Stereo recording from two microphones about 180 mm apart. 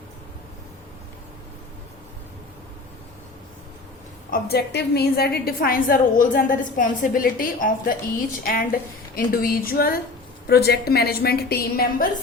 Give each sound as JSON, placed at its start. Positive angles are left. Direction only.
{"t": 4.3, "sound": "a woman's voice", "side_deg": 60}